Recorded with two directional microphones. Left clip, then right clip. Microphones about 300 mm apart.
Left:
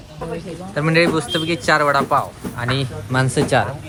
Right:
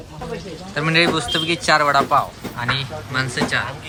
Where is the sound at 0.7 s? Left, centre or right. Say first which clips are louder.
Left 1 dB; centre.